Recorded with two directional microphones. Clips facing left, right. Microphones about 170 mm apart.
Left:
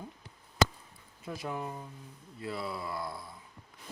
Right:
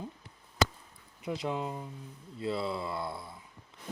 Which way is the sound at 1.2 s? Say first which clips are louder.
Right 4 dB; 20° right (ahead or behind).